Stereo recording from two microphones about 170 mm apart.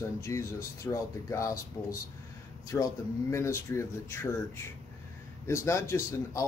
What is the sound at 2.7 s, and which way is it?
Speech, 10° left (ahead or behind).